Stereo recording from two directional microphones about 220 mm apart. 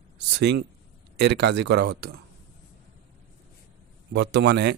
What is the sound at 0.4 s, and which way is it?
Speech, 50° right (ahead or behind).